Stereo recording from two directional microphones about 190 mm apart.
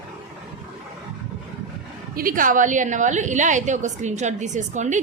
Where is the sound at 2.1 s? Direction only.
45° right (ahead or behind).